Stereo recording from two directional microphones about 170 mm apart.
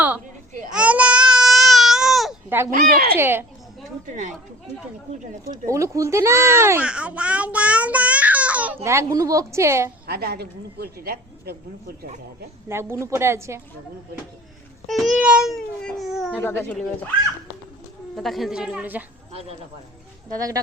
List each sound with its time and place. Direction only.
0.7 s baby cry: 5° right (ahead or behind)
2.6 s speech: 55° right (ahead or behind)
3.2 s speech: 15° right (ahead or behind)
4.0 s speech: 50° right (ahead or behind)
5.6 s a child's voice: 15° right (ahead or behind)
10.1 s speech: 65° right (ahead or behind)
12.6 s speech: 15° right (ahead or behind)
14.8 s speech: centre (ahead or behind)
16.4 s speech: 15° left (ahead or behind)
18.2 s speech: centre (ahead or behind)
19.3 s speech: 35° right (ahead or behind)
20.3 s speech: 20° right (ahead or behind)